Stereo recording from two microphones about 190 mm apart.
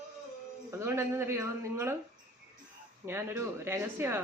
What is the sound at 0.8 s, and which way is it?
Speech, 15° right (ahead or behind).